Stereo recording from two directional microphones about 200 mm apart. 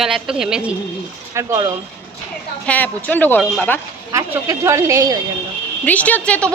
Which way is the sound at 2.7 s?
10° left (ahead or behind).